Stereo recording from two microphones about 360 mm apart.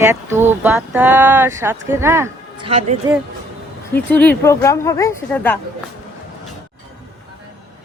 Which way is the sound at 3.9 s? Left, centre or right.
Centre.